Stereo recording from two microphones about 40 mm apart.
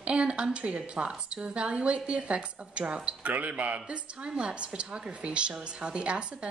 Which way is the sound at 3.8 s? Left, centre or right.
Right.